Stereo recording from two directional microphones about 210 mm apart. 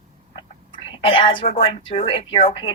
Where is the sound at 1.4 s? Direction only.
30° left (ahead or behind).